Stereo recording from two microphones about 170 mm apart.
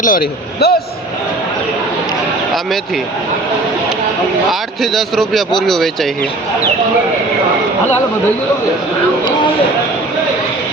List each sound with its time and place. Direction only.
0.0 s a man's voice: 60° left (ahead or behind)
2.5 s speech: centre (ahead or behind)
4.8 s a man's voice: centre (ahead or behind)